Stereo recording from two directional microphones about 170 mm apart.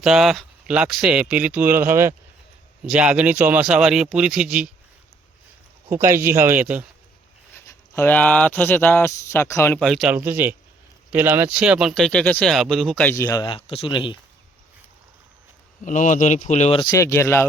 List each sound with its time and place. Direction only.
0.0 s speech: centre (ahead or behind)
5.9 s speech: 15° right (ahead or behind)
7.5 s speech: 15° left (ahead or behind)
9.7 s speech: centre (ahead or behind)
10.2 s speech: 10° right (ahead or behind); by 13.1 s 5° left (ahead or behind)
13.1 s speech: 20° left (ahead or behind)
15.8 s speech: 45° left (ahead or behind)
16.8 s speech: 20° left (ahead or behind)